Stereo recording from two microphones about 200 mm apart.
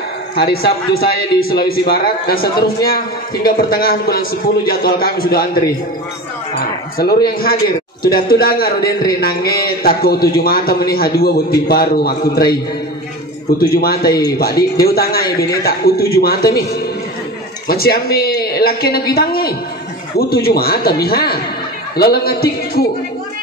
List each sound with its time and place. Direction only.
0.4 s a man's voice: 50° left (ahead or behind)
7.3 s a man's voice: 50° left (ahead or behind)
13.6 s a man's voice: 50° left (ahead or behind)